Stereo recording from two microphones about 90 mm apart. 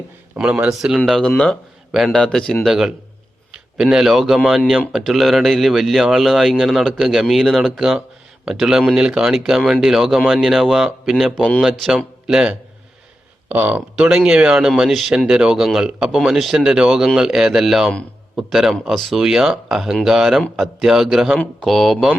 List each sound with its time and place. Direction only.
0.3 s speech: 10° right (ahead or behind)
1.0 s a man's voice: 5° left (ahead or behind)
2.1 s speech: 10° left (ahead or behind)
2.6 s speech: 5° right (ahead or behind)
13.5 s speech: 20° right (ahead or behind)
13.9 s speech: 10° right (ahead or behind)